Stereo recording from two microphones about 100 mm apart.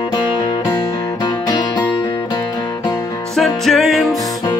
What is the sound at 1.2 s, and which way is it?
Music, 45° left (ahead or behind).